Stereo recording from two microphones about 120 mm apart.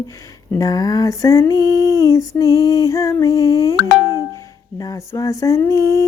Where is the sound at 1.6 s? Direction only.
25° right (ahead or behind).